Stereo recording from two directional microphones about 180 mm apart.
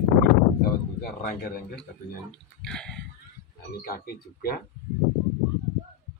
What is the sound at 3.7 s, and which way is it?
Speech, 55° left (ahead or behind).